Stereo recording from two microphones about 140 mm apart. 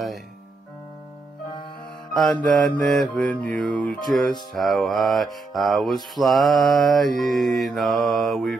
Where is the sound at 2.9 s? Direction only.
5° left (ahead or behind).